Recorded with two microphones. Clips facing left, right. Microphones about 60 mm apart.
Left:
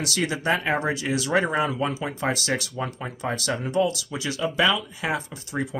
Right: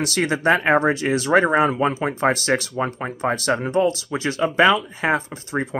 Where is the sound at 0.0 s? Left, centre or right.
Right.